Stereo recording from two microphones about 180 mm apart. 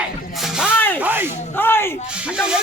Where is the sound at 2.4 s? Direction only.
5° right (ahead or behind).